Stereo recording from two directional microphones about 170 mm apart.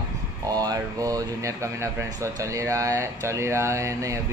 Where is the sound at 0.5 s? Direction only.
20° right (ahead or behind).